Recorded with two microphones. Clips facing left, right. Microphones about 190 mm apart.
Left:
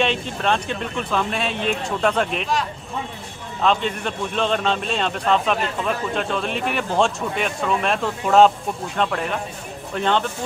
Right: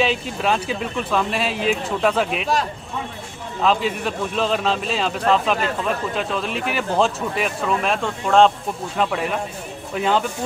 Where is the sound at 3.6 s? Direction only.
5° right (ahead or behind).